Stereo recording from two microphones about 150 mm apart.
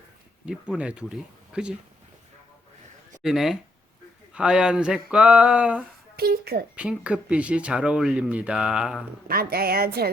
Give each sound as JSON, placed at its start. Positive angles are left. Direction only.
{"t": 0.4, "sound": "speech", "side_deg": -5}
{"t": 3.2, "sound": "speech", "side_deg": 0}
{"t": 6.1, "sound": "a woman's voice", "side_deg": -90}
{"t": 6.7, "sound": "speech", "side_deg": -5}
{"t": 9.2, "sound": "a woman's voice", "side_deg": -90}